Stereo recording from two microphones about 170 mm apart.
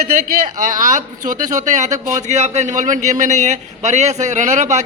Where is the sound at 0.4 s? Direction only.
45° right (ahead or behind).